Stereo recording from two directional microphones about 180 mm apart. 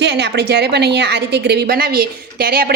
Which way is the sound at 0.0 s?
70° right (ahead or behind).